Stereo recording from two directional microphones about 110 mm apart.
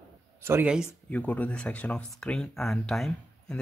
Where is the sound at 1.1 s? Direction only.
15° left (ahead or behind).